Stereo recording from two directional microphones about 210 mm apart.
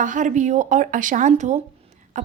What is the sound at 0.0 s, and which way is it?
A woman's voice, 35° right (ahead or behind).